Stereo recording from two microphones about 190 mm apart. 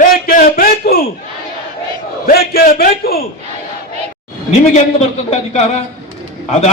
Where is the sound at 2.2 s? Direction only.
55° left (ahead or behind).